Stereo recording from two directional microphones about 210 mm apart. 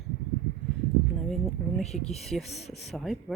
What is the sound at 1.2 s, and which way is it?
Speech, centre (ahead or behind).